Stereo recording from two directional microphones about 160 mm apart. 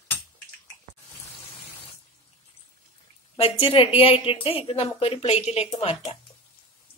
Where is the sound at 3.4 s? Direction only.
35° left (ahead or behind).